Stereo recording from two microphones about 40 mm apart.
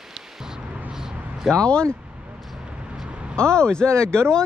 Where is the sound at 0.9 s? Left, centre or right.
Centre.